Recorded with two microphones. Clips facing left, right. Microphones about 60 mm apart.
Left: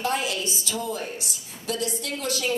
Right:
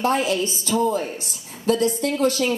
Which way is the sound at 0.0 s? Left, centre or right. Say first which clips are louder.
Right 6 dB; right.